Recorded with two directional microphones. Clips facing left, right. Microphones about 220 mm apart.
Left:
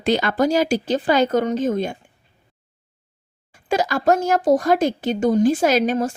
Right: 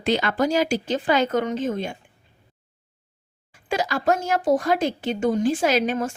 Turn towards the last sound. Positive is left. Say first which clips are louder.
# left 3 dB
turn(degrees=40)  # may be behind; listen again after turning